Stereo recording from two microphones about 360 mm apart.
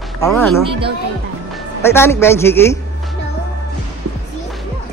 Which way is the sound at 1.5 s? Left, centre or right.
Centre.